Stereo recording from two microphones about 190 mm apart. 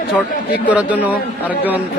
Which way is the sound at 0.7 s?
10° right (ahead or behind).